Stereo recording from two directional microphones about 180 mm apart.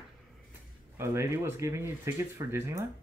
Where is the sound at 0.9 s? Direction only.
15° right (ahead or behind).